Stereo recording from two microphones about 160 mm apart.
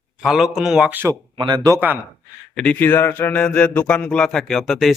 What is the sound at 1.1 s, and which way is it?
Speech, 30° right (ahead or behind).